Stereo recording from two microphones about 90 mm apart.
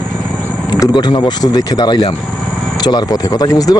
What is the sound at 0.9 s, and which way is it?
Speech, 55° left (ahead or behind).